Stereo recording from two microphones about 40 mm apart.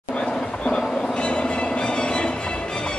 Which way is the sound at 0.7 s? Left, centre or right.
Left.